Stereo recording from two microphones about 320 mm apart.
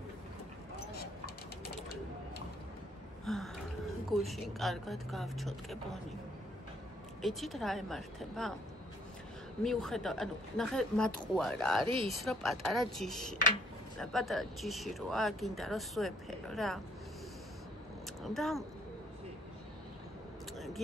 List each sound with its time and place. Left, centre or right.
3.3 s gasp: centre
4.1 s speech: centre
7.2 s speech: centre
9.6 s speech: centre
11.9 s speech: centre
12.2 s speech: centre
18.2 s speech: centre
20.5 s a sound: centre